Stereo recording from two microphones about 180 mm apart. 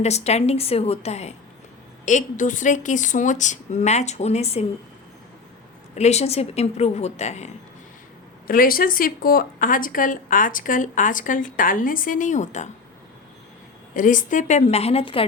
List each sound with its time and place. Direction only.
0.0 s a woman's voice: 35° left (ahead or behind)
6.0 s a woman's voice: 40° left (ahead or behind)
8.4 s speech: 50° left (ahead or behind)
13.9 s a woman's voice: 45° left (ahead or behind); by 15.3 s 30° left (ahead or behind)